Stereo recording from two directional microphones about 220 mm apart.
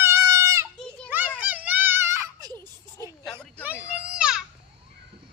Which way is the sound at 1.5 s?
5° right (ahead or behind).